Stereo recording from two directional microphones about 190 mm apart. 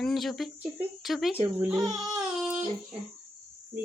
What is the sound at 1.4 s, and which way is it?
Speech, 10° right (ahead or behind).